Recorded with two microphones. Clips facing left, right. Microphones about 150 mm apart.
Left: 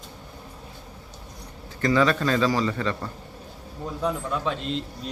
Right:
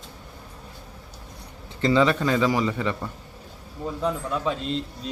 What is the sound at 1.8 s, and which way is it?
A man's voice, 20° right (ahead or behind).